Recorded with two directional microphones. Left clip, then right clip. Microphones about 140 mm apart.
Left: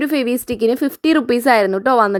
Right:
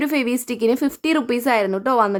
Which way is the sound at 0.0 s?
25° left (ahead or behind).